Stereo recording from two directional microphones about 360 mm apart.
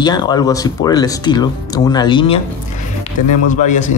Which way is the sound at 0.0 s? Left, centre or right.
Centre.